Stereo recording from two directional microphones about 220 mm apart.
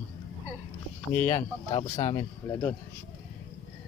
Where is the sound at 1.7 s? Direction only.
30° left (ahead or behind).